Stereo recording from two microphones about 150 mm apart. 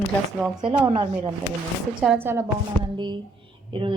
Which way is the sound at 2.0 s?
10° right (ahead or behind).